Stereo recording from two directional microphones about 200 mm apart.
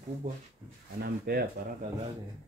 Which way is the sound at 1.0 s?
55° right (ahead or behind).